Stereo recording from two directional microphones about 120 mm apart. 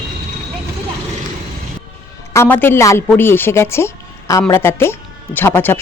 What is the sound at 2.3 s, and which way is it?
Speech, 15° left (ahead or behind).